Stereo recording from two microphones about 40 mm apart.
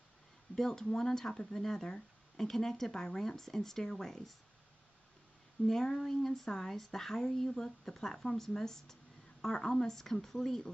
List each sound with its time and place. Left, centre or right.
0.6 s speech: centre
5.7 s a woman's voice: centre
9.9 s speech: centre